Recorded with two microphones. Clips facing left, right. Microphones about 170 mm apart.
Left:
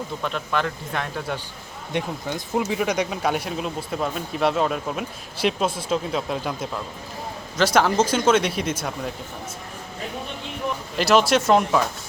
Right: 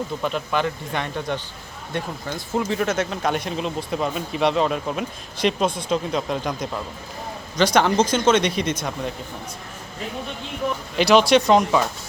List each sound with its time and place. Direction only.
0.2 s speech: centre (ahead or behind)
1.9 s speech: 15° left (ahead or behind)
10.9 s speech: centre (ahead or behind)